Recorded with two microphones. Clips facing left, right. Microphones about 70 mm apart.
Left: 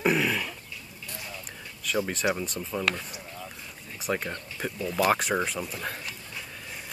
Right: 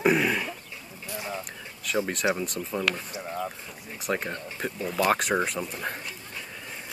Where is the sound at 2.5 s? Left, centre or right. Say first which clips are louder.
Right 1 dB; centre.